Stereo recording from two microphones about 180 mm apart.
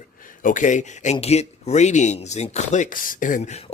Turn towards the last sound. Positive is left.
turn(degrees=35)  # may be behind; listen again after turning